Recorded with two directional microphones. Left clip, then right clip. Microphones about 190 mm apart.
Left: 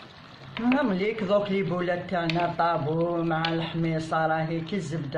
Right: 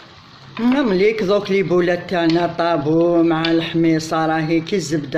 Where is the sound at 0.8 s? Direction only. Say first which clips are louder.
Right 14 dB; 50° right (ahead or behind).